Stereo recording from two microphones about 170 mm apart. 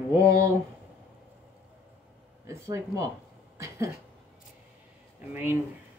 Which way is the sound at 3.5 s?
15° right (ahead or behind).